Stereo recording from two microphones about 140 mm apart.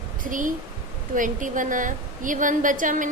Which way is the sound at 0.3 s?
70° right (ahead or behind).